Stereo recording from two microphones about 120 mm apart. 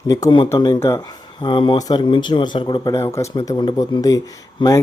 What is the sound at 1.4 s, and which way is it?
Speech, 45° left (ahead or behind).